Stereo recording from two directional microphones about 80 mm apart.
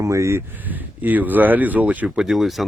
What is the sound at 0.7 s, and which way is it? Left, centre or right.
Speech, right.